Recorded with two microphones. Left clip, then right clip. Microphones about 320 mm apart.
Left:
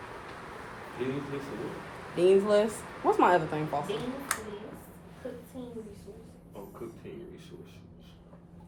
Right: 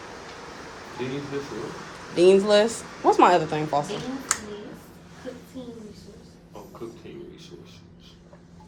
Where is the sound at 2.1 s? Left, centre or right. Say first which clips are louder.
Right 6 dB; right.